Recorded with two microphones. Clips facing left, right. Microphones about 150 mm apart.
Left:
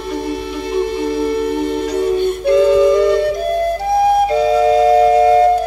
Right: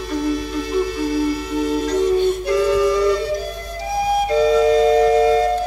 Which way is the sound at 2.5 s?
25° left (ahead or behind).